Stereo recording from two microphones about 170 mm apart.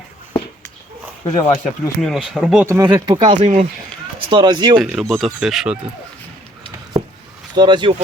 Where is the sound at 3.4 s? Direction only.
40° right (ahead or behind).